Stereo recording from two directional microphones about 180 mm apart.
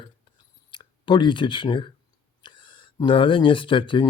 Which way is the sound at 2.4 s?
25° left (ahead or behind).